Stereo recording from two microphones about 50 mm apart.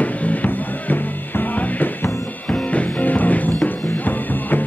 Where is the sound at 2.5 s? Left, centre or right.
Left.